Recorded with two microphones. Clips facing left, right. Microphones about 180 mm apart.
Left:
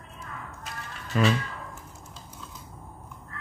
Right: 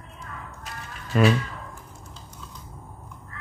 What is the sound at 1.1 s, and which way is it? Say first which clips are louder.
Speech: right 4 dB; 55° right (ahead or behind).